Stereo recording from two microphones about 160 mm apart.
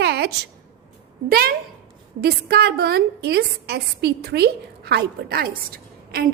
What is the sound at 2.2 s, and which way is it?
A woman's voice, 80° right.